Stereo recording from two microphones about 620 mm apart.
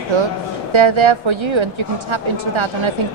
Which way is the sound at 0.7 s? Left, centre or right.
Right.